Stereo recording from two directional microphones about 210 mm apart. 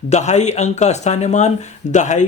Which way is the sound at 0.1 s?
35° left (ahead or behind).